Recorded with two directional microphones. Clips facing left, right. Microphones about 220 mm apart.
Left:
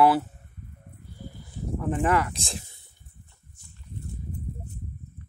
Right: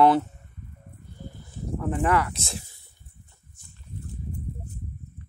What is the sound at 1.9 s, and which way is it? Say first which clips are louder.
Speech: even; 20° left (ahead or behind).